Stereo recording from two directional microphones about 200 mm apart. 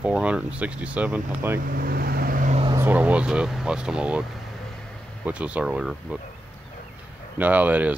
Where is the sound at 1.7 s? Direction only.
50° right (ahead or behind).